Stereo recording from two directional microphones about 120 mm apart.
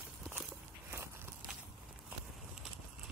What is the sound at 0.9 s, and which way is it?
Walk, 20° right (ahead or behind).